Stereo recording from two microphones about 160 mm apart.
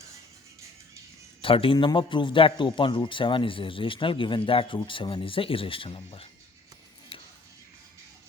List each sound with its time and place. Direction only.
1.4 s a man's voice: 35° left (ahead or behind)